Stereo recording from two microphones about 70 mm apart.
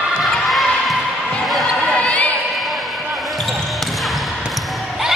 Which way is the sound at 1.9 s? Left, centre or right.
Centre.